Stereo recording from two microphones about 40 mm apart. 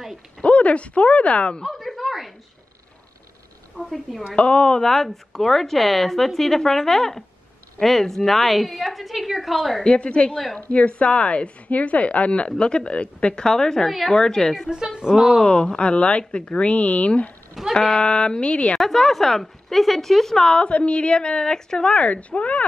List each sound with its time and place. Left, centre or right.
0.4 s speech: left
1.7 s a sound: centre
4.4 s speech: left
4.8 s a woman's voice: centre
9.8 s speech: left
13.8 s a woman's voice: centre
14.1 s a woman's voice: centre
15.0 s speech: centre
15.4 s speech: left
17.6 s speech: centre
17.9 s speech: left
18.8 s speech: centre; by 22.6 s left